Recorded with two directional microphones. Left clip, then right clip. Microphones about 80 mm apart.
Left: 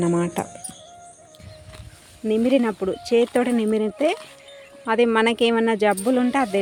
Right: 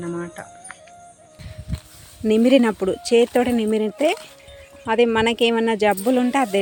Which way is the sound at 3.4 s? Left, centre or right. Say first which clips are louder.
Right 1 dB; centre.